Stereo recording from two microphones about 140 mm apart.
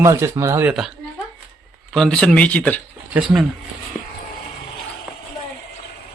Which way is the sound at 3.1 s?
5° right (ahead or behind).